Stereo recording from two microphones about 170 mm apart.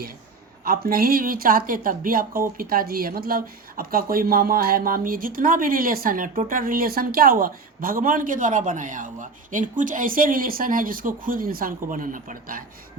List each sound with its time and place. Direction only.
0.6 s speech: 60° right (ahead or behind)